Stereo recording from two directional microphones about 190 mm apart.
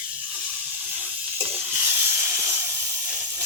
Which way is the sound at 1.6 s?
10° right (ahead or behind).